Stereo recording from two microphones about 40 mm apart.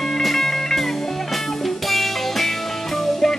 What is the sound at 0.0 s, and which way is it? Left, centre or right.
Music, centre.